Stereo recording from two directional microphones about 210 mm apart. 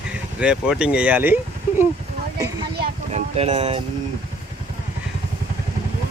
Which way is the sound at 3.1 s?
30° right (ahead or behind).